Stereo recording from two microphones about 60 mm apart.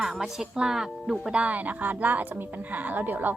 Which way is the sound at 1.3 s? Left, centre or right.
Right.